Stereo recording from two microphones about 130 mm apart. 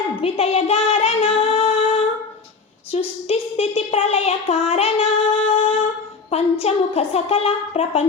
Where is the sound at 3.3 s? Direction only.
50° left (ahead or behind).